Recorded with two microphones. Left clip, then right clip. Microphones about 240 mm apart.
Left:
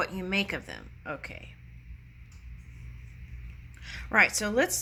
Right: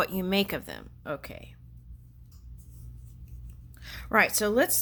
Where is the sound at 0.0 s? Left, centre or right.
Right.